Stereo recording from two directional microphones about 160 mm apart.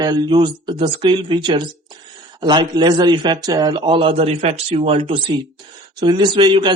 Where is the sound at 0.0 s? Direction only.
25° right (ahead or behind).